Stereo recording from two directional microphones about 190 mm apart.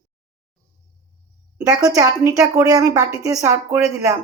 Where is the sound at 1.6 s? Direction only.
20° right (ahead or behind).